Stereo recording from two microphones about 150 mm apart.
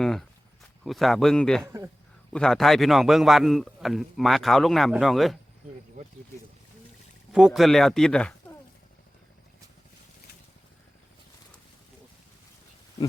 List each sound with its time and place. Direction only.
0.0 s a man's voice: 5° left (ahead or behind)
1.6 s speech: 20° right (ahead or behind)
2.3 s a man's voice: 5° left (ahead or behind)
7.3 s a man's voice: 5° right (ahead or behind)